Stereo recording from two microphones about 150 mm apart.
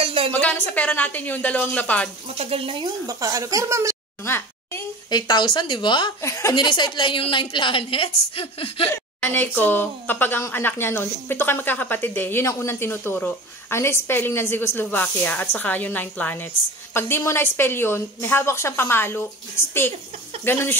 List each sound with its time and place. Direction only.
0.0 s a sound: 40° right (ahead or behind)
0.3 s a woman's voice: 10° left (ahead or behind)
2.2 s speech: 40° right (ahead or behind)
3.1 s speech: 25° right (ahead or behind)
4.2 s a sound: 15° left (ahead or behind)
5.1 s a woman's voice: 30° left (ahead or behind)
6.2 s a woman's voice: 20° left (ahead or behind)
6.5 s a woman's voice: 30° left (ahead or behind)
8.9 s a woman's voice: 15° left (ahead or behind)
20.4 s a woman's voice: 15° left (ahead or behind)